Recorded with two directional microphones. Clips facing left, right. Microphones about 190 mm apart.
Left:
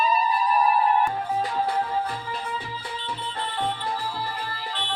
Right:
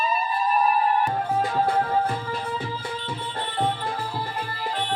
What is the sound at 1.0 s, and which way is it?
Music, 50° right (ahead or behind).